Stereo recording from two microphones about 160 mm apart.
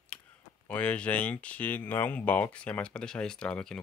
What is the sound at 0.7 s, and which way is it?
Speech, 10° left (ahead or behind).